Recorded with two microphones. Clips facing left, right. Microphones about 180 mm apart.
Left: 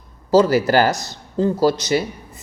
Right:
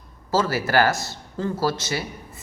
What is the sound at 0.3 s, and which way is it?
Speech, 15° left (ahead or behind).